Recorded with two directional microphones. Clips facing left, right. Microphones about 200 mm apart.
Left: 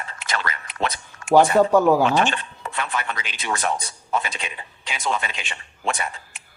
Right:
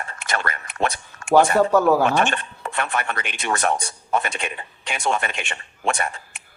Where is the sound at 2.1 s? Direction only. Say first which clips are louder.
Even; 55° right (ahead or behind).